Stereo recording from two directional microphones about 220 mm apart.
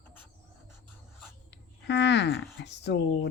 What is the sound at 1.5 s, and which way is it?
Speech, 55° left (ahead or behind).